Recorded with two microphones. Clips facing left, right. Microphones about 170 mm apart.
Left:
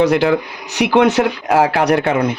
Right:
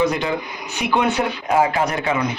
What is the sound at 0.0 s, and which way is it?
Speech, 70° left (ahead or behind).